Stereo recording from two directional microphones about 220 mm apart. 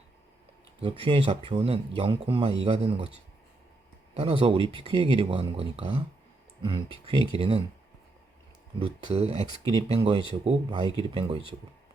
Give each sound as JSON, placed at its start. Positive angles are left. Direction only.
{"t": 0.8, "sound": "speech", "side_deg": -25}
{"t": 4.1, "sound": "speech", "side_deg": -25}
{"t": 8.8, "sound": "speech", "side_deg": -25}